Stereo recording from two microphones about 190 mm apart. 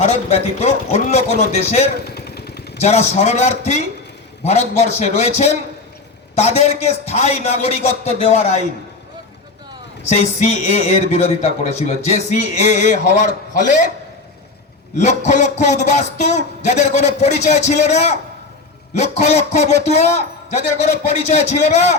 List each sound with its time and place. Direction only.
0.0 s a man's voice: 35° left (ahead or behind)
2.0 s motorcycle: 55° left (ahead or behind)
2.8 s a man's voice: 35° left (ahead or behind)
10.1 s a man's voice: 35° left (ahead or behind)
14.9 s a man's voice: 40° left (ahead or behind)